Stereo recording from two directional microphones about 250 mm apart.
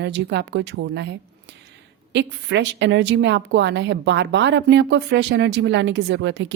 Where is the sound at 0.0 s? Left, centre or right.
Right.